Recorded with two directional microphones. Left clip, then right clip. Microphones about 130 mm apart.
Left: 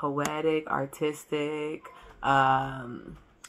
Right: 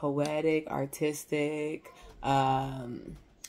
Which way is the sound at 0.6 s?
15° right (ahead or behind).